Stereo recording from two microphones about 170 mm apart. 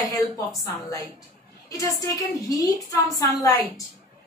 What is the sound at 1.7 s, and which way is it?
A woman's voice, 20° left (ahead or behind).